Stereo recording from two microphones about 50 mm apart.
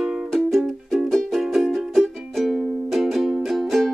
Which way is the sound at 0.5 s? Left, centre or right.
Centre.